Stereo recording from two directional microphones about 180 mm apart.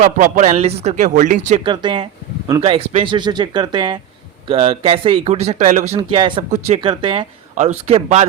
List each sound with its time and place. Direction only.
0.0 s speech: 45° right (ahead or behind)
1.6 s speech: 25° right (ahead or behind)
6.0 s speech: 30° right (ahead or behind)
7.5 s speech: 40° right (ahead or behind)